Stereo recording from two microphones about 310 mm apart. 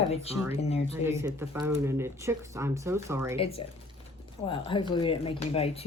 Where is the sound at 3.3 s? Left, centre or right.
Centre.